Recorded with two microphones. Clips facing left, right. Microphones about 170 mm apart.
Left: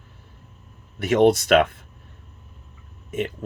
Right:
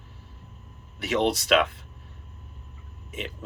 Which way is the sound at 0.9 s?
50° left (ahead or behind).